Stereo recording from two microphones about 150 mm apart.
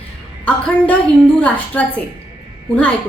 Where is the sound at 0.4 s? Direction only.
10° left (ahead or behind).